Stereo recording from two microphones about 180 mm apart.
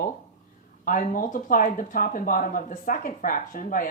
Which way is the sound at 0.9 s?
50° left (ahead or behind).